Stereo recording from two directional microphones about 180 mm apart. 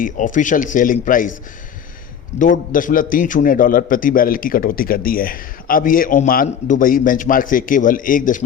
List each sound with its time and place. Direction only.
0.0 s a man's voice: 45° left (ahead or behind)
2.4 s a man's voice: 50° left (ahead or behind)